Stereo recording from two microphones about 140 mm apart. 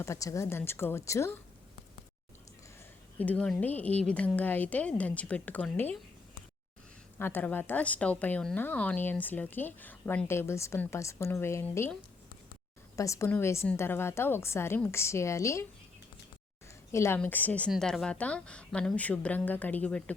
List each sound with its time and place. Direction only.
0.0 s a woman's voice: 20° left (ahead or behind)
3.2 s a woman's voice: 10° left (ahead or behind)
7.2 s a woman's voice: 15° left (ahead or behind)
13.0 s a woman's voice: 20° left (ahead or behind)
16.9 s a woman's voice: 20° left (ahead or behind)